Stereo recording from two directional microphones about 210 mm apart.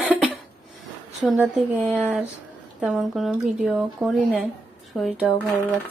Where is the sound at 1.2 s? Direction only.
5° right (ahead or behind).